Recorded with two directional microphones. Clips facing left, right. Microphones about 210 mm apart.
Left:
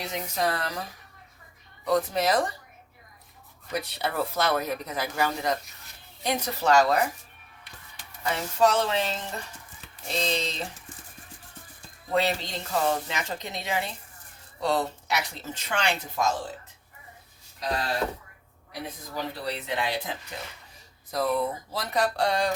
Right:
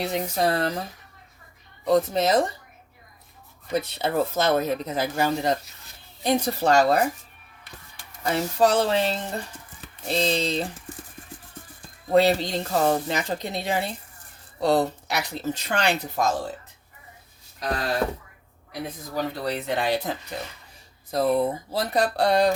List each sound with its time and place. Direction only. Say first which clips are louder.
0.0 s speech: right 5 dB; 30° right (ahead or behind)
3.7 s speech: right 5 dB; 25° right (ahead or behind)
8.2 s speech: right 3 dB; 35° right (ahead or behind)
12.1 s speech: right 7 dB; 35° right (ahead or behind)
19.1 s speech: right 5 dB; 45° right (ahead or behind)
21.1 s speech: right 5 dB; 30° right (ahead or behind)